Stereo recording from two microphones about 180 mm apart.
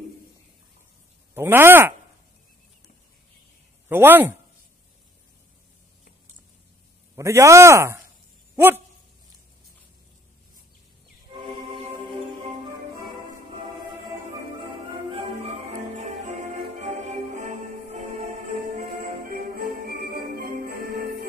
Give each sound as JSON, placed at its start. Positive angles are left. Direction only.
{"t": 1.3, "sound": "speech", "side_deg": -10}
{"t": 3.9, "sound": "speech", "side_deg": -10}
{"t": 7.2, "sound": "speech", "side_deg": -15}
{"t": 15.0, "sound": "music", "side_deg": -35}
{"t": 19.3, "sound": "music", "side_deg": -55}